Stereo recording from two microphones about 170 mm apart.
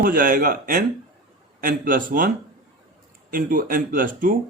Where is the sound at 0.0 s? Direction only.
55° right (ahead or behind).